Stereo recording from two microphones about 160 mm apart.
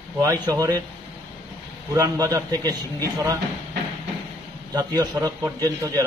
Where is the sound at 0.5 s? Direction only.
20° right (ahead or behind).